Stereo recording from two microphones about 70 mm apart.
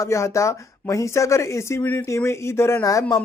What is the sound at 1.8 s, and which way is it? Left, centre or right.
Speech, left.